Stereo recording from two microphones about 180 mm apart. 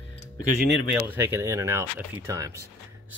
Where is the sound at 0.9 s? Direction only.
10° right (ahead or behind).